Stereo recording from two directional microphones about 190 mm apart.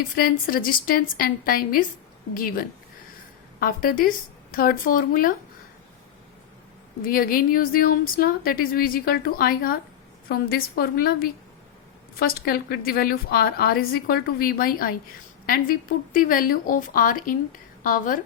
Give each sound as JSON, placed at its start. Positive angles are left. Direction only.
{"t": 0.2, "sound": "a woman's voice", "side_deg": 50}
{"t": 7.0, "sound": "a woman's voice", "side_deg": 50}